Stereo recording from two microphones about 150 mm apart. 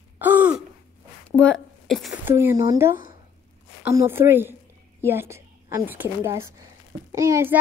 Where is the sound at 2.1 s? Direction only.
15° right (ahead or behind).